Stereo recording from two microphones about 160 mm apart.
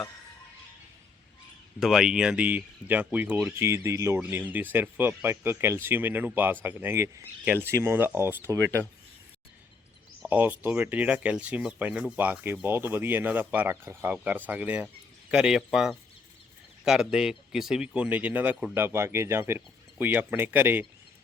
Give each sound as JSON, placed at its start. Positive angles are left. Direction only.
{"t": 1.8, "sound": "speech", "side_deg": 0}
{"t": 10.2, "sound": "speech", "side_deg": -10}